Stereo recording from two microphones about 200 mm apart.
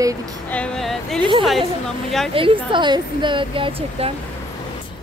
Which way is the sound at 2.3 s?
25° right (ahead or behind).